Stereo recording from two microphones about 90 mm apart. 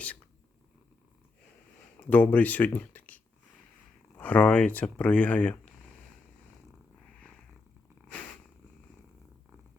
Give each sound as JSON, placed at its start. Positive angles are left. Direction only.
{"t": 2.0, "sound": "speech", "side_deg": 20}